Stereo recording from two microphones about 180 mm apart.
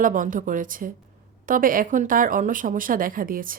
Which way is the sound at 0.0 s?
50° right (ahead or behind).